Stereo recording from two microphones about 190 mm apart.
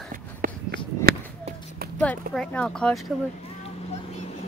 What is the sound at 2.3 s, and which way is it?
Speech, 5° left (ahead or behind).